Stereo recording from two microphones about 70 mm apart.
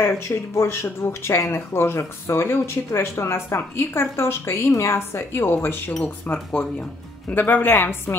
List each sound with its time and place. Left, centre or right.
0.3 s speech: left
6.5 s speech: centre